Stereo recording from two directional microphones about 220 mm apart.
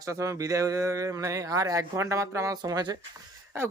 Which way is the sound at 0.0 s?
15° right (ahead or behind).